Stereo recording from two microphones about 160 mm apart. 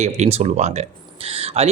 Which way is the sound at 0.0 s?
45° right (ahead or behind).